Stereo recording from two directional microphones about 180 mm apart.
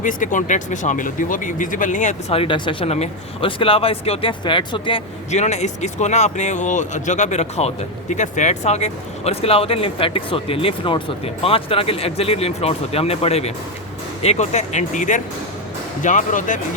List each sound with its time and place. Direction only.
0.0 s speech: 45° left (ahead or behind)